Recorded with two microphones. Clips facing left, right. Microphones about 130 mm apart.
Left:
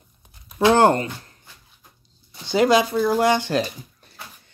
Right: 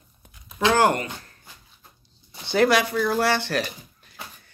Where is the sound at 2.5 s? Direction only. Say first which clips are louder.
Left 2 dB; 15° left (ahead or behind).